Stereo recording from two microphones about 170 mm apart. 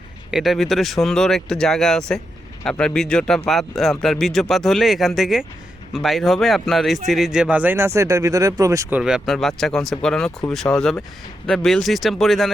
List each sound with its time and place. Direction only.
0.3 s a man's voice: centre (ahead or behind); by 9.0 s 20° right (ahead or behind)
9.0 s a man's voice: 5° right (ahead or behind)